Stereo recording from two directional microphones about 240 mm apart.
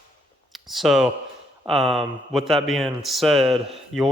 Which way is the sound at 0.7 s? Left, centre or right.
Centre.